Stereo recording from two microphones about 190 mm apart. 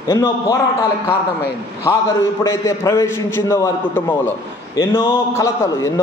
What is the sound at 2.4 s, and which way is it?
A man's voice, 15° left (ahead or behind).